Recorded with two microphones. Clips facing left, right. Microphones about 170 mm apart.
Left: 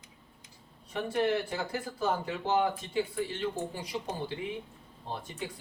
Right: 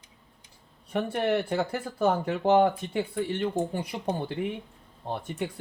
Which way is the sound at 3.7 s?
55° right (ahead or behind).